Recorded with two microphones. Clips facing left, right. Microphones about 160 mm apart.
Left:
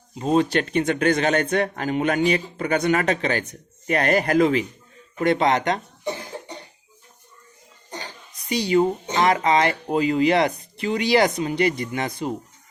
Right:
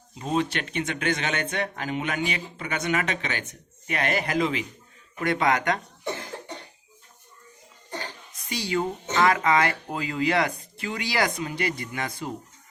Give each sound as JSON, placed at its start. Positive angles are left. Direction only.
{"t": 0.2, "sound": "speech", "side_deg": 35}
{"t": 5.2, "sound": "speech", "side_deg": 25}
{"t": 8.4, "sound": "speech", "side_deg": 20}